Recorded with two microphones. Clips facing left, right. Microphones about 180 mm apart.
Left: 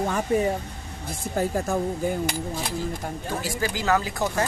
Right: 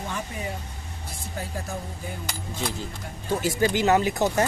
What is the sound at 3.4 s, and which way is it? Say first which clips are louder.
Speech: right 7 dB; 25° right (ahead or behind).